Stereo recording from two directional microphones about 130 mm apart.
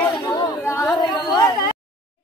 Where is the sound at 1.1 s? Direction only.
30° left (ahead or behind).